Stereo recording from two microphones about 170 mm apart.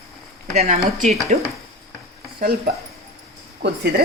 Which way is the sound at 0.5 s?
40° right (ahead or behind).